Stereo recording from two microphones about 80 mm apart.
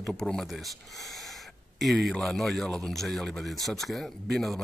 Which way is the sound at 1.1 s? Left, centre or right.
Centre.